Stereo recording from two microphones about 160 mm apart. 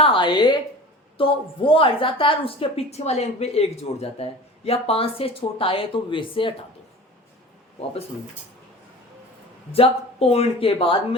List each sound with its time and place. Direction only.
0.0 s a sound: 30° left (ahead or behind)
1.2 s a woman's voice: 35° left (ahead or behind)
9.7 s a woman's voice: 35° left (ahead or behind)